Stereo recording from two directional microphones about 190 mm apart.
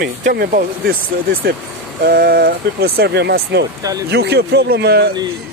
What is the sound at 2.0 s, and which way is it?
Speech, 50° right (ahead or behind).